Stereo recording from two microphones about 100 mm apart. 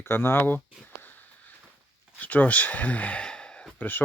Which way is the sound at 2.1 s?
15° left (ahead or behind).